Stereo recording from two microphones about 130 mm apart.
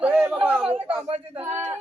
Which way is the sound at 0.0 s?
10° right (ahead or behind).